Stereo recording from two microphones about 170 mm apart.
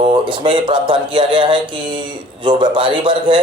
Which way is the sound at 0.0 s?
30° right (ahead or behind).